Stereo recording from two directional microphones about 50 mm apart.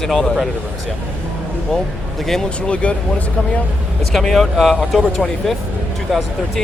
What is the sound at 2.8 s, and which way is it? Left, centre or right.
Speech, left.